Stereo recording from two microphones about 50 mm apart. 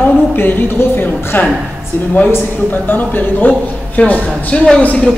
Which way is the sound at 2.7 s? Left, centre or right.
Left.